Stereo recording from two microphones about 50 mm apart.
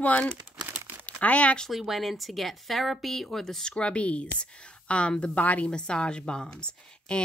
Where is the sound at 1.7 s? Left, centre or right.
Centre; by 5.6 s left.